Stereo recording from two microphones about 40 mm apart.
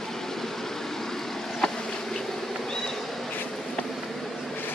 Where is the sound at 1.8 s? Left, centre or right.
Centre.